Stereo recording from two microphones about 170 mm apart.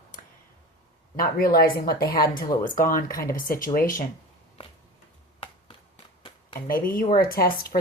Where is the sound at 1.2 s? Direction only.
60° left (ahead or behind).